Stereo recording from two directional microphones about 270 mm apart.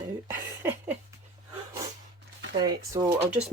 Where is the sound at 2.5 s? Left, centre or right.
Centre.